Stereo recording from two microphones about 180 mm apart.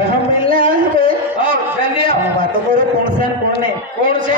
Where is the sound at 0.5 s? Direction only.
30° left (ahead or behind).